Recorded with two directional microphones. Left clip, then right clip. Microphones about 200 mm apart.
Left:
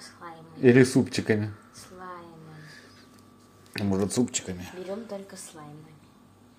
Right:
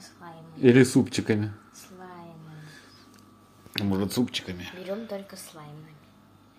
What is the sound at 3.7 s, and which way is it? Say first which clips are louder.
Speech: left 1 dB; 5° left (ahead or behind).